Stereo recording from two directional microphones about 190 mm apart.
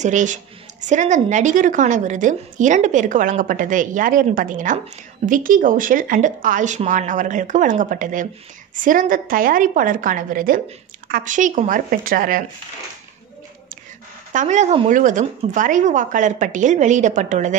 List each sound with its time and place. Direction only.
0.0 s a woman's voice: 40° right (ahead or behind)
14.3 s speech: 40° right (ahead or behind)